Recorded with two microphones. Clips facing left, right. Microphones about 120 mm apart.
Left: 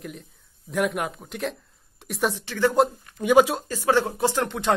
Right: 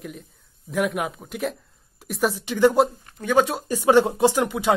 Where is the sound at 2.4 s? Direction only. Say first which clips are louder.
Right 7 dB; 15° right (ahead or behind).